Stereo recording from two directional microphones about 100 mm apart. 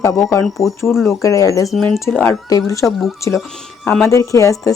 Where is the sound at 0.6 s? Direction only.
5° right (ahead or behind).